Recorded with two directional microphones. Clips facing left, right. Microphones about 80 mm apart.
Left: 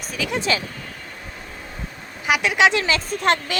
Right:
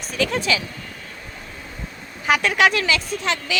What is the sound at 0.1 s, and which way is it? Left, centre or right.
Speech, centre.